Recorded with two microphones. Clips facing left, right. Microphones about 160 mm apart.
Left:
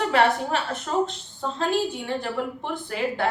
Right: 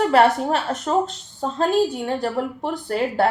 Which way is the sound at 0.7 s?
40° right (ahead or behind).